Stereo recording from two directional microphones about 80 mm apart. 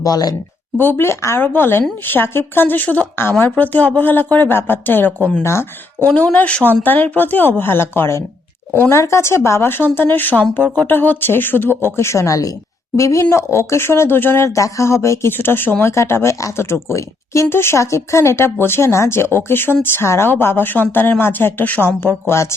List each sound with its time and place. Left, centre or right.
0.0 s speech: left
0.8 s speech: left
6.1 s speech: centre
11.9 s speech: left